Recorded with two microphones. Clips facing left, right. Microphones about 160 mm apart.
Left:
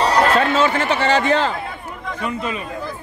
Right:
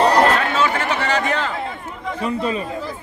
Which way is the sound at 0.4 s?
30° left (ahead or behind).